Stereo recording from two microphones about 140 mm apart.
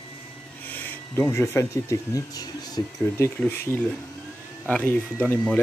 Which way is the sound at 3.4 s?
15° left (ahead or behind).